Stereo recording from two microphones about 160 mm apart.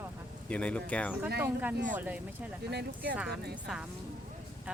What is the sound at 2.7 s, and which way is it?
Speech, 75° right (ahead or behind).